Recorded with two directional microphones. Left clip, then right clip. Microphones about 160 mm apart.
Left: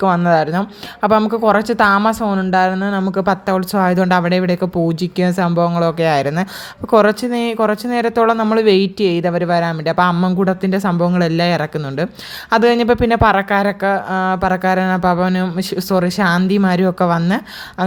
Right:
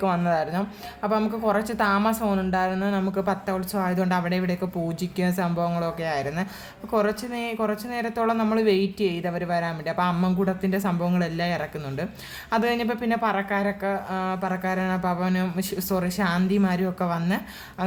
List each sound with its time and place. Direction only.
0.0 s speech: 40° left (ahead or behind)
2.0 s speech: 30° left (ahead or behind); by 17.8 s 45° left (ahead or behind)